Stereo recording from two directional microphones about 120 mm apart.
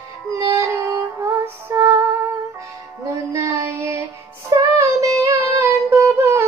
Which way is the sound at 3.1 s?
25° right (ahead or behind).